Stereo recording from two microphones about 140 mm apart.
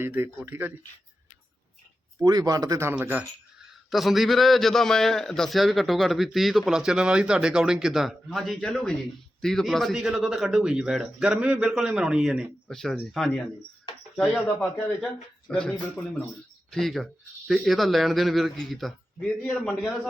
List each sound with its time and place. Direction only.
0.0 s speech: 15° right (ahead or behind)
2.2 s speech: 25° right (ahead or behind)
2.9 s speech: 10° right (ahead or behind)
3.8 s a man's voice: centre (ahead or behind)